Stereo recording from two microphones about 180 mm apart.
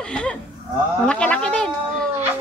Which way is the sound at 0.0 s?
5° left (ahead or behind).